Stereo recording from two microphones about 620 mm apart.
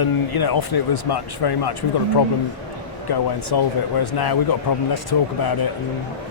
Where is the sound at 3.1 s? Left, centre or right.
Left.